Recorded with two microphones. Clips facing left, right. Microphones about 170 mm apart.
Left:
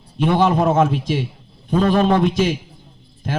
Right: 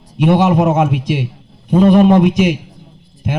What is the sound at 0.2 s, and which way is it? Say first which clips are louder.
Speech: right 4 dB; 15° right (ahead or behind).